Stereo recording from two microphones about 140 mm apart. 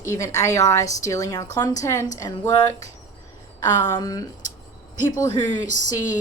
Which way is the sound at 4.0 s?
25° left (ahead or behind).